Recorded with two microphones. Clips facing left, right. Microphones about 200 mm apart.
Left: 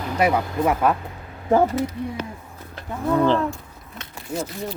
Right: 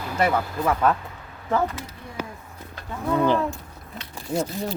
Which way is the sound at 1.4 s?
35° left (ahead or behind).